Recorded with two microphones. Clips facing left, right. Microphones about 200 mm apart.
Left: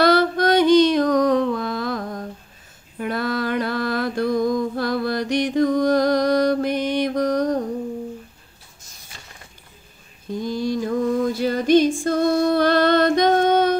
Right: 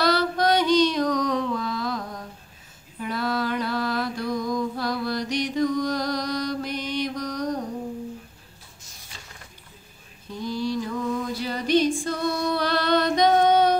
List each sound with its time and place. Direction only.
0.0 s a sound: 55° left (ahead or behind)
3.0 s mantra: 55° left (ahead or behind)
10.3 s female singing: 50° left (ahead or behind)